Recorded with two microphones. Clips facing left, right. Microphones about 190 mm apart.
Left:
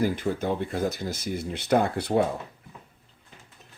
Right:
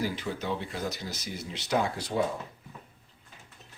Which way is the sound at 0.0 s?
50° left (ahead or behind).